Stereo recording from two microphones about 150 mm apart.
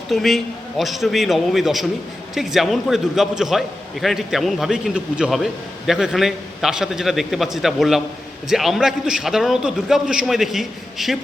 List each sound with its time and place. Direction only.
0.1 s a man's voice: centre (ahead or behind)